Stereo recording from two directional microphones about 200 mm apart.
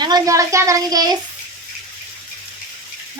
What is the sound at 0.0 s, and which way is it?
Speech, 20° right (ahead or behind).